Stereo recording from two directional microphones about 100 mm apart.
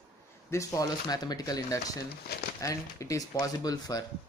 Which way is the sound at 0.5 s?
35° left (ahead or behind).